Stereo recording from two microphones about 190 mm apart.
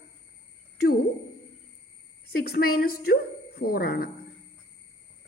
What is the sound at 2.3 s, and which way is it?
A woman's voice, 55° left (ahead or behind).